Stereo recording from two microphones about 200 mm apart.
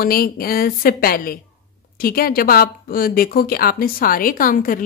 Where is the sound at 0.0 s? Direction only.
45° left (ahead or behind).